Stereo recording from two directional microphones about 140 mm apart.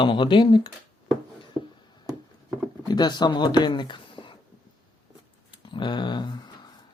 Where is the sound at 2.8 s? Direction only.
30° left (ahead or behind).